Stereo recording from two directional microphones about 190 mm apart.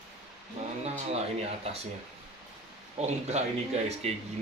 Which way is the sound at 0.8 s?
35° right (ahead or behind).